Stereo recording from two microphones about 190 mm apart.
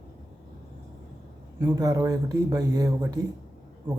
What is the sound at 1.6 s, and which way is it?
Speech, 20° right (ahead or behind).